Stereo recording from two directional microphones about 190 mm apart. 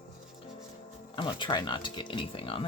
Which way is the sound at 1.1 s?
25° left (ahead or behind).